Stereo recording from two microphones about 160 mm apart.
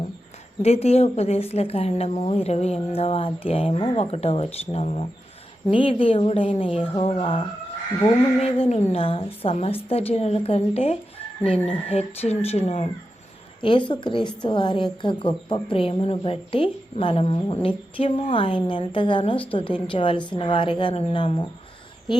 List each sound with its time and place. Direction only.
0.6 s a woman's voice: 40° left (ahead or behind)
13.6 s a woman's voice: 30° left (ahead or behind)